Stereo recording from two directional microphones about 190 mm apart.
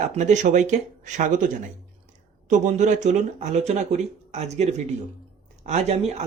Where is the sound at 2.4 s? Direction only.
40° right (ahead or behind).